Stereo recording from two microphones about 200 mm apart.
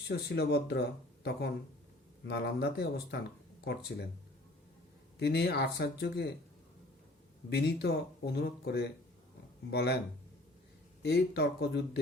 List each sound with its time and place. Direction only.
0.1 s speech: 55° left (ahead or behind)
2.2 s speech: 55° left (ahead or behind)
5.2 s speech: 55° left (ahead or behind)
7.5 s speech: 55° left (ahead or behind)
11.0 s speech: 55° left (ahead or behind)